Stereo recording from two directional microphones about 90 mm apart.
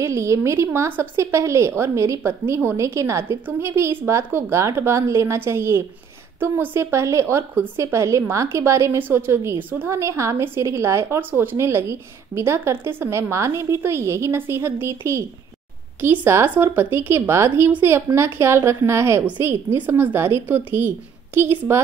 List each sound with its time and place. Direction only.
0.0 s a woman's voice: 35° right (ahead or behind)
9.9 s a woman's voice: 35° right (ahead or behind)